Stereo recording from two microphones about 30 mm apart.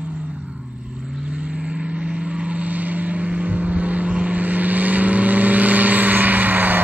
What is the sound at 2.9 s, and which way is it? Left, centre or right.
Vehicle, right.